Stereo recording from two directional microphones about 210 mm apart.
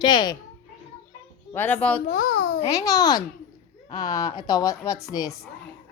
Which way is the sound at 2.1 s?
40° left (ahead or behind).